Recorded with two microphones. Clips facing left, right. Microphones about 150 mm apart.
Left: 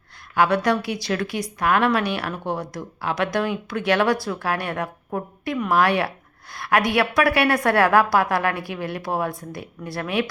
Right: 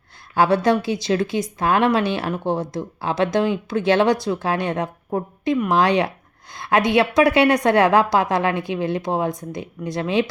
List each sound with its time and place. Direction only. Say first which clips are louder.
0.3 s a woman's voice: right 3 dB; 30° right (ahead or behind)